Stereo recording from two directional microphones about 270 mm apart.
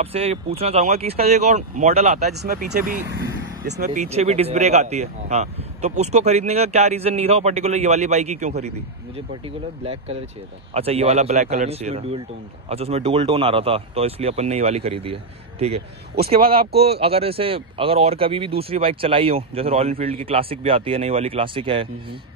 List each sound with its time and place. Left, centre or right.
0.0 s speech: right
10.7 s speech: right